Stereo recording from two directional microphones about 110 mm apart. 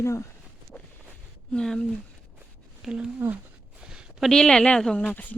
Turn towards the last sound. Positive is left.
turn(degrees=15)  # may be behind; listen again after turning